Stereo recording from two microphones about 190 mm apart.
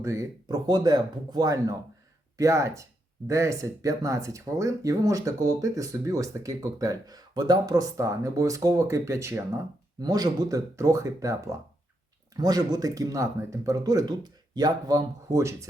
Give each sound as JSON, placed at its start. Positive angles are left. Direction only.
{"t": 0.0, "sound": "speech", "side_deg": -15}